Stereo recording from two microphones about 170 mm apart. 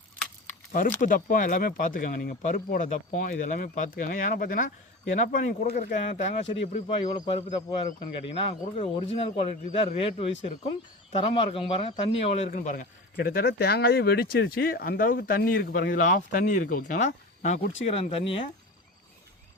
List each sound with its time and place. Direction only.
0.4 s speech: 50° left (ahead or behind)
6.5 s speech: 30° left (ahead or behind)
12.5 s speech: 55° left (ahead or behind)
13.1 s speech: 70° left (ahead or behind); by 18.3 s 35° left (ahead or behind)